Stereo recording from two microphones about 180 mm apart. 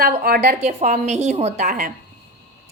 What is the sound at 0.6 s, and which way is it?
A woman's voice, 40° right (ahead or behind).